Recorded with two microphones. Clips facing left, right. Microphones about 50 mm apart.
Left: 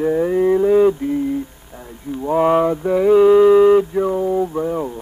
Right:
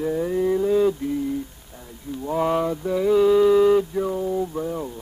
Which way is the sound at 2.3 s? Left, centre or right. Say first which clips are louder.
Left 7 dB; left.